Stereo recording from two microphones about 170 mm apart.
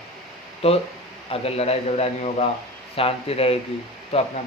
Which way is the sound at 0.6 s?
35° left (ahead or behind).